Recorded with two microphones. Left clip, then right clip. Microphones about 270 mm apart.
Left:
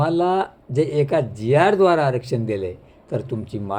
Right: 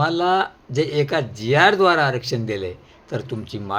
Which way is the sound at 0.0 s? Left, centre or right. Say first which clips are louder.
Right 1 dB; centre.